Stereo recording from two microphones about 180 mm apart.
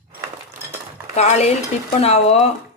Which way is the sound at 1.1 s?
35° left (ahead or behind).